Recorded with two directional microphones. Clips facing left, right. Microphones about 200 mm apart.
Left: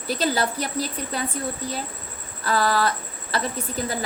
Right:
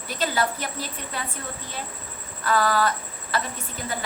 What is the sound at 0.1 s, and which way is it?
A woman's voice, 35° left (ahead or behind).